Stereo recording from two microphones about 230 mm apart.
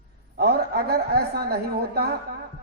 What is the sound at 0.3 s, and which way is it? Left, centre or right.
A man's voice, right.